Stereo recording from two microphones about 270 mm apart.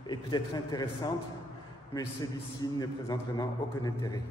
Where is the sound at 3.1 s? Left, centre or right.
Centre.